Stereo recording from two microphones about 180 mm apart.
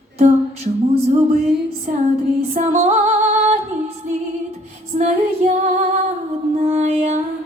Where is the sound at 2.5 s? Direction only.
40° right (ahead or behind).